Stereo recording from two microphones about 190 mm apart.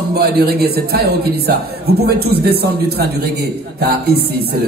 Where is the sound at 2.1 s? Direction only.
55° right (ahead or behind).